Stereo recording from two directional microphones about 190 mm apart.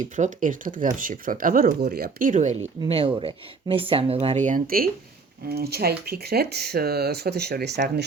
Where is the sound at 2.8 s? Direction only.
30° right (ahead or behind).